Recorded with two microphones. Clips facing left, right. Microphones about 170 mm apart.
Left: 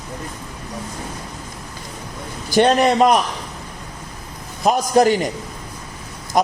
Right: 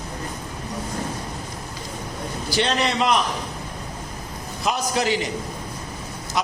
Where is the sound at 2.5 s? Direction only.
50° left (ahead or behind).